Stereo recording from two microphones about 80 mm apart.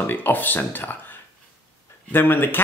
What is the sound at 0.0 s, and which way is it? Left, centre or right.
Speech, left.